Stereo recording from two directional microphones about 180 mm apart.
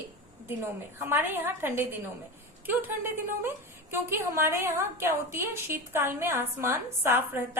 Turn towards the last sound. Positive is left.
turn(degrees=-10)  # may be behind; listen again after turning